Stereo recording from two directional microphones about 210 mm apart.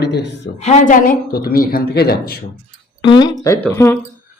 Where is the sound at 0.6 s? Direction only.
35° left (ahead or behind).